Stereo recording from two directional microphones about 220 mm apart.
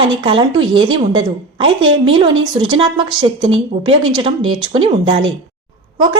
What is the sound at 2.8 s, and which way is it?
Speech, 20° right (ahead or behind).